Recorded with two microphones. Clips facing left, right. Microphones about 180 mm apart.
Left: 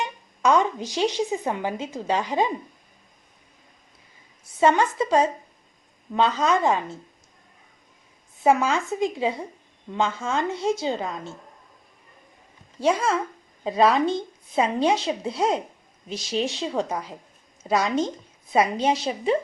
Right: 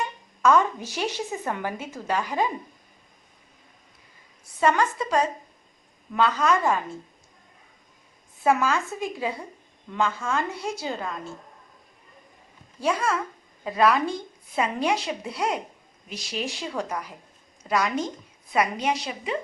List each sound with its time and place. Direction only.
0.0 s speech: 15° left (ahead or behind)
4.6 s a woman's voice: 25° left (ahead or behind)
8.4 s a woman's voice: 20° left (ahead or behind)
12.8 s a woman's voice: 20° left (ahead or behind)